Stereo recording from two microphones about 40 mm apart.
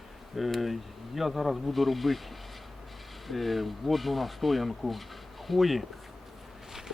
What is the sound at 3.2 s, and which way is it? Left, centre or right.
Speech, centre.